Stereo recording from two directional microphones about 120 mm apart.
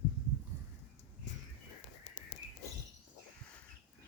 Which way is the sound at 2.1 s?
65° left (ahead or behind).